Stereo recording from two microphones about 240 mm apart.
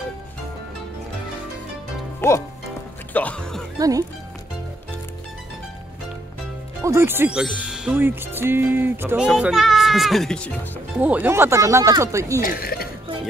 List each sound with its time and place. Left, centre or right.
2.2 s speech: centre
3.7 s speech: centre
6.8 s speech: centre
12.4 s speech: left